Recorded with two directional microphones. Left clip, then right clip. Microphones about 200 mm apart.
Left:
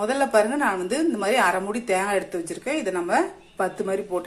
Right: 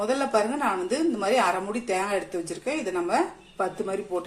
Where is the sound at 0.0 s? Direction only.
20° left (ahead or behind).